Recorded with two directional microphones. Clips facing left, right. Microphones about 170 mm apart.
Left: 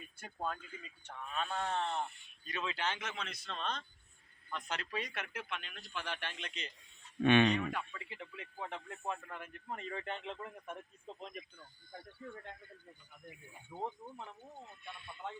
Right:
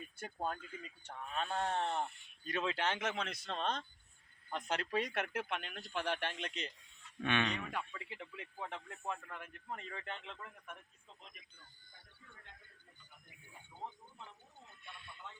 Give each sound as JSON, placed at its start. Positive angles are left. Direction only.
{"t": 0.2, "sound": "speech", "side_deg": -40}
{"t": 7.2, "sound": "speech", "side_deg": 25}
{"t": 7.7, "sound": "speech", "side_deg": -10}
{"t": 10.2, "sound": "speech", "side_deg": 30}
{"t": 13.7, "sound": "speech", "side_deg": 70}